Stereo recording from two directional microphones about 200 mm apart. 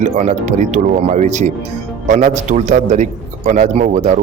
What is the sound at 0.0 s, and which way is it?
A man's voice, 35° right (ahead or behind).